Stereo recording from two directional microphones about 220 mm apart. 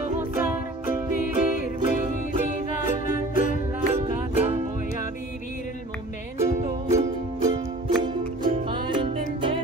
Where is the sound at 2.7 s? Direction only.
35° left (ahead or behind).